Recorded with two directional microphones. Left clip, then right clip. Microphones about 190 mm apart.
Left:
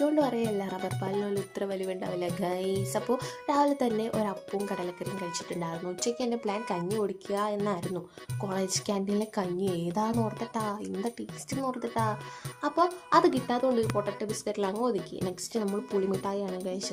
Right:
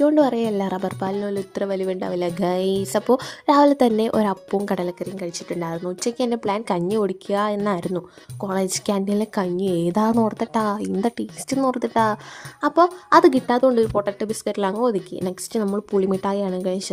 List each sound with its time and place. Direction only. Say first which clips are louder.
0.0 s speech: right 9 dB; 45° right (ahead or behind)
4.9 s speech: right 6 dB; 35° right (ahead or behind); by 12.1 s 55° right (ahead or behind)
12.6 s speech: right 10 dB; 45° right (ahead or behind)